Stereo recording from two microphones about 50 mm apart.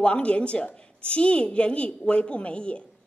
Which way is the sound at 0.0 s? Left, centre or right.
Left.